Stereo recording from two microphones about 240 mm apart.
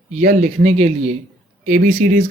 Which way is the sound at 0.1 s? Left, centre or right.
Right.